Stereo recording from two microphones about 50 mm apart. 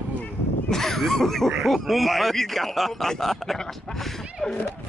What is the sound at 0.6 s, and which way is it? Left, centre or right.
A man's voice, centre.